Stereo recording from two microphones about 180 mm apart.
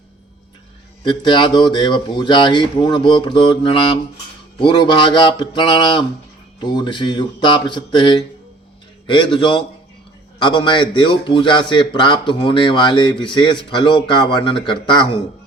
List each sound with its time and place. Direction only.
1.0 s a man's voice: 25° left (ahead or behind)